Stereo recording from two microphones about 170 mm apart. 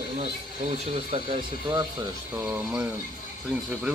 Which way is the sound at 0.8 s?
35° right (ahead or behind).